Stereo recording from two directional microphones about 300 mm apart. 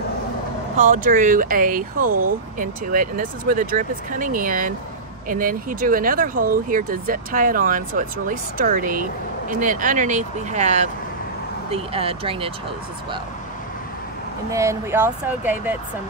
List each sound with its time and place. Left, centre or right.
0.7 s speech: right
14.5 s speech: centre